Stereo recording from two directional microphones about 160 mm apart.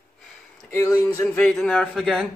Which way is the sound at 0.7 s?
20° left (ahead or behind).